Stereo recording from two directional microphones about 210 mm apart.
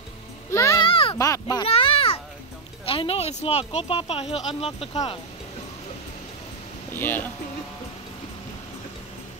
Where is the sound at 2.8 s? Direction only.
25° left (ahead or behind).